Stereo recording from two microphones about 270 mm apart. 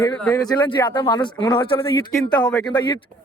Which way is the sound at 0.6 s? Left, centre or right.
Centre.